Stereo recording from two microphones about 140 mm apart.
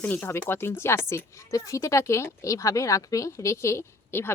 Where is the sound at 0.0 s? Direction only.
15° left (ahead or behind).